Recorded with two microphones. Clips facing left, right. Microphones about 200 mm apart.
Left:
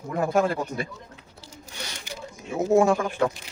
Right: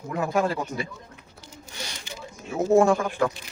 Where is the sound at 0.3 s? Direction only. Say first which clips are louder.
Left 1 dB; 50° left (ahead or behind).